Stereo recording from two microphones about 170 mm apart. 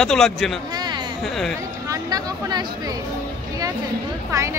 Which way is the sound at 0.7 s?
25° right (ahead or behind).